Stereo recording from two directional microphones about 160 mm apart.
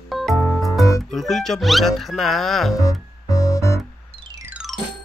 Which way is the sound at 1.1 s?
Centre (ahead or behind).